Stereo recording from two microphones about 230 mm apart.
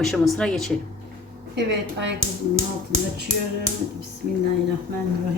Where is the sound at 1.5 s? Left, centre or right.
Right.